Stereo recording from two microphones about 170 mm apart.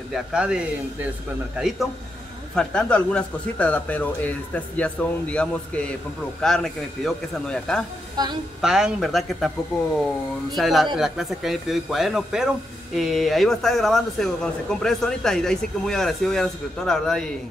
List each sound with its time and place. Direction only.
0.1 s a man's voice: 5° right (ahead or behind)
2.5 s a man's voice: 5° left (ahead or behind)
8.2 s a woman's voice: 25° right (ahead or behind)
8.5 s a man's voice: 5° right (ahead or behind)
10.5 s a man's voice: centre (ahead or behind)